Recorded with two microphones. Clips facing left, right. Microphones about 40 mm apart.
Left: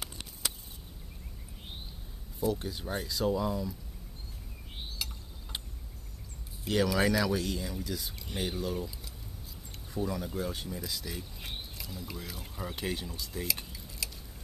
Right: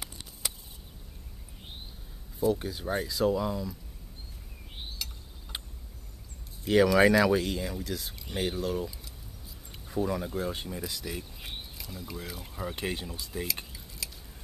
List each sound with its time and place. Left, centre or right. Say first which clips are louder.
2.4 s speech: right 4 dB; centre
5.0 s mechanisms: left 1 dB; centre
5.5 s a sound: right 1 dB; centre
6.7 s speech: right 6 dB; centre
12.7 s speech: left 1 dB; right
13.7 s a sound: left 1 dB; centre